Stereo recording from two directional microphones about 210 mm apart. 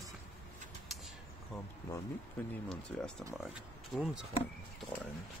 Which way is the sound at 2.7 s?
Centre (ahead or behind).